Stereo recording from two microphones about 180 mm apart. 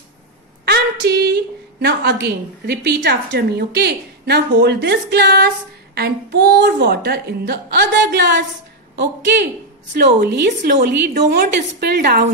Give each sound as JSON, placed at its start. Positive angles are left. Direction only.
{"t": 0.7, "sound": "a woman's voice", "side_deg": -65}
{"t": 9.9, "sound": "a woman's voice", "side_deg": -65}